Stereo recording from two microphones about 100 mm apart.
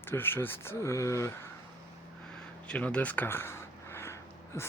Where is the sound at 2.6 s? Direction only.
10° left (ahead or behind).